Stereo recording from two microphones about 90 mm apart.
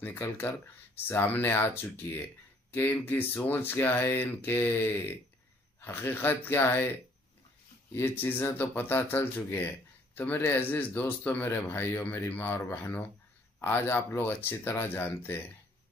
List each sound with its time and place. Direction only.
0.0 s speech: 20° left (ahead or behind)
7.9 s speech: 25° left (ahead or behind)